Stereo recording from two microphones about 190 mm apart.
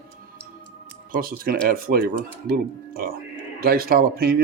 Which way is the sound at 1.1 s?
50° right (ahead or behind).